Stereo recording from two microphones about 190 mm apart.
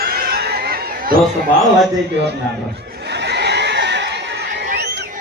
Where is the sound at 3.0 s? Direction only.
60° right (ahead or behind).